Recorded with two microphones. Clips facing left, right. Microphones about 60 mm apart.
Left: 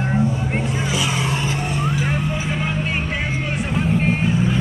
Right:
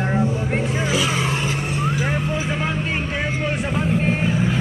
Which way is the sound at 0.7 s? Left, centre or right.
Right.